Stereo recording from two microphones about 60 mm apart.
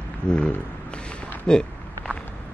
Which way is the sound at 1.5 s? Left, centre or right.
Centre.